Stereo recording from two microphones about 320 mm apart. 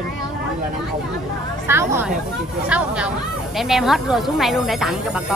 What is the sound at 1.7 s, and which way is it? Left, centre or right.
Speech, centre.